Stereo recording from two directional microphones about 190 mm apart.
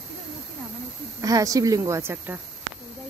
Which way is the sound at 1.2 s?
20° right (ahead or behind).